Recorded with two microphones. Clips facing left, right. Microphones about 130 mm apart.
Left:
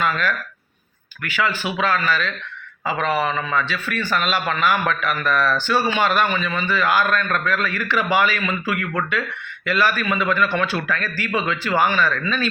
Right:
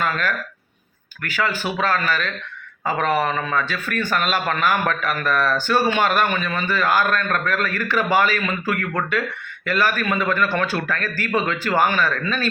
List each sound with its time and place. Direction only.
0.0 s a man's voice: 45° right (ahead or behind)